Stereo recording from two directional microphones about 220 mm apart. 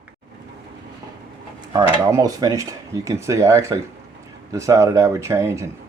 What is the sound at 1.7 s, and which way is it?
Speech, 15° right (ahead or behind).